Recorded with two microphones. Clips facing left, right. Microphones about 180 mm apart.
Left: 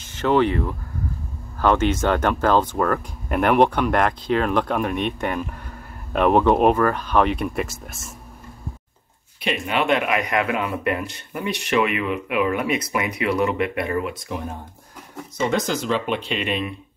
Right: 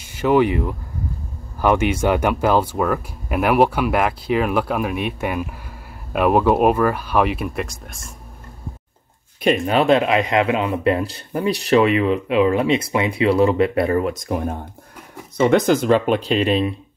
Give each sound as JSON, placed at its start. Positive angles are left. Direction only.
{"t": 0.0, "sound": "speech", "side_deg": -10}
{"t": 9.4, "sound": "speech", "side_deg": -40}